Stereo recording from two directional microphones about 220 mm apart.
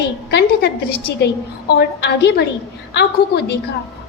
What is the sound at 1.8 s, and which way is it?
A woman's voice, 50° left (ahead or behind).